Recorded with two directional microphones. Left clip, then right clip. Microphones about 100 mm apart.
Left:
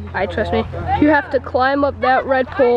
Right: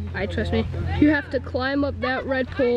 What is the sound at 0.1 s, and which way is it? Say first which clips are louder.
Speech: left 8 dB; 20° left (ahead or behind).